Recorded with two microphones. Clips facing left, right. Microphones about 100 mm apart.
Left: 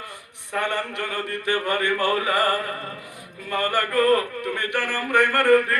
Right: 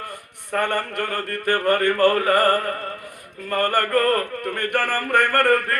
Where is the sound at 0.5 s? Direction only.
50° right (ahead or behind).